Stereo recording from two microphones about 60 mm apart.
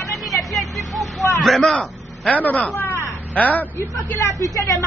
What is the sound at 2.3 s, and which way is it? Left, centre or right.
Speech, left.